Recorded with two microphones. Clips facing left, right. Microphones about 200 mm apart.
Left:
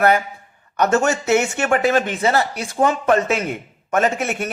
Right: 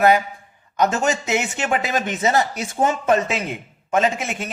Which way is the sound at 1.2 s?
15° right (ahead or behind).